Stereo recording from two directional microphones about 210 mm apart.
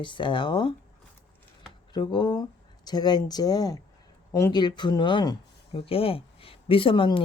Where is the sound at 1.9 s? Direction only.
20° left (ahead or behind).